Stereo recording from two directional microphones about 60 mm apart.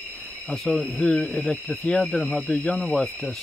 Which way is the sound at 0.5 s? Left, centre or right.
Centre.